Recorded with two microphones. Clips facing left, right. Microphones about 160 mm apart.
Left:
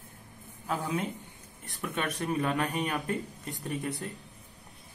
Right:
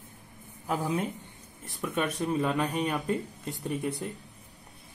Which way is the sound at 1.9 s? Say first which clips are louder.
Right 3 dB; centre (ahead or behind).